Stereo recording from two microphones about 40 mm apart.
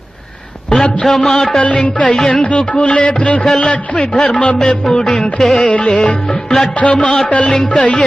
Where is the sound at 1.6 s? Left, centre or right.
Left.